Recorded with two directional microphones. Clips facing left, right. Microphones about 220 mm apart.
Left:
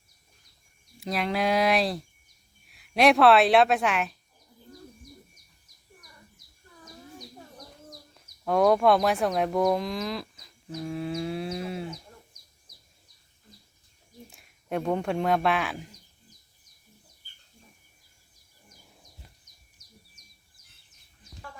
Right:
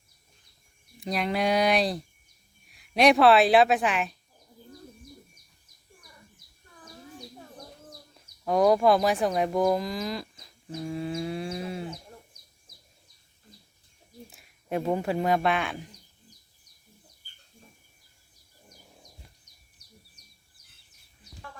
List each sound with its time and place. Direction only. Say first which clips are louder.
0.9 s speech: even; centre (ahead or behind)
8.4 s speech: even; centre (ahead or behind)
14.3 s speech: even; centre (ahead or behind)
19.8 s bird: right 2 dB; 60° right (ahead or behind)